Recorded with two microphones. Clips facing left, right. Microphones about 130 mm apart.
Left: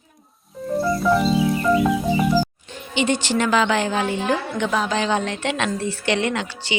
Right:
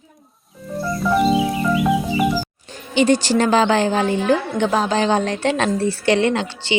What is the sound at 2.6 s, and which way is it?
A woman's voice, 40° right (ahead or behind).